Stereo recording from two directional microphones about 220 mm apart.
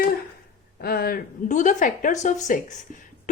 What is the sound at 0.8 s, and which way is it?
A woman's voice, 45° left (ahead or behind).